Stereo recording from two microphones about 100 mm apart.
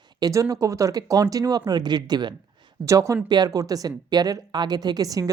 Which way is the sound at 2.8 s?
30° right (ahead or behind).